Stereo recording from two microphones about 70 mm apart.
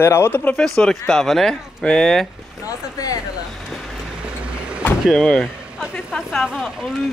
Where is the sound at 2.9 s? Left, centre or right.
Left.